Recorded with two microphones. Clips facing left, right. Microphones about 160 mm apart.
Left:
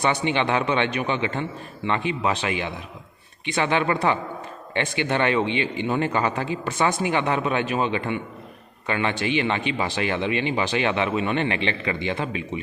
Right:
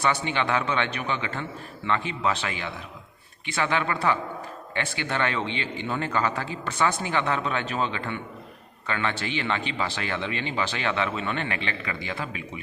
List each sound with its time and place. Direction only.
0.0 s a man's voice: 20° left (ahead or behind)